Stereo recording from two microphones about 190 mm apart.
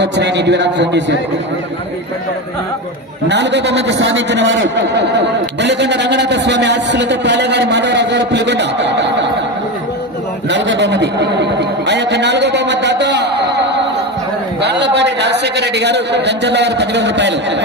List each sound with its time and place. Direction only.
0.0 s a man's voice: 65° right (ahead or behind)
3.3 s a man's voice: 65° right (ahead or behind)
10.5 s a man's voice: 70° right (ahead or behind)